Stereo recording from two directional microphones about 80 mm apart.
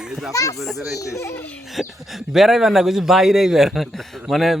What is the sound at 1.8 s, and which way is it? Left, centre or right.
A man's voice, centre.